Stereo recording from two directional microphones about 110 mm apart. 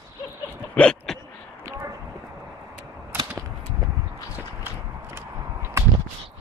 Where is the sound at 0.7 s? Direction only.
10° left (ahead or behind).